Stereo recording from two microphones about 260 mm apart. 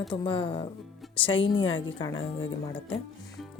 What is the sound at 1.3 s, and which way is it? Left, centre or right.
A woman's voice, left.